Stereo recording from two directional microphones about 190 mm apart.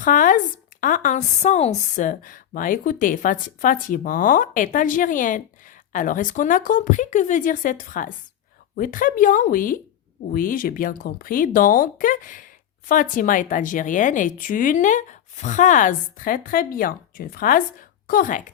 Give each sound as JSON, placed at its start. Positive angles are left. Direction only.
{"t": 0.0, "sound": "a woman's voice", "side_deg": 45}